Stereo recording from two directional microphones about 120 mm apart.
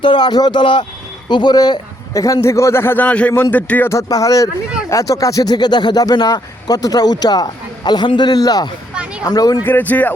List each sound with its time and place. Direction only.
0.0 s a man's voice: 40° left (ahead or behind); by 3.9 s 15° left (ahead or behind)
3.9 s a man's voice: 30° left (ahead or behind)
9.6 s a man's voice: 15° left (ahead or behind)